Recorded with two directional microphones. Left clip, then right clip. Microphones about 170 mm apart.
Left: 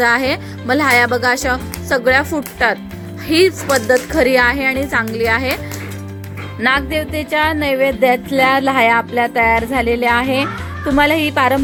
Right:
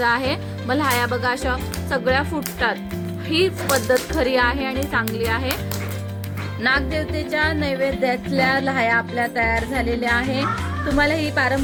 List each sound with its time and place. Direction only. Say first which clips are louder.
0.0 s speech: left 6 dB; 30° left (ahead or behind)
6.6 s music: left 5 dB; 25° left (ahead or behind)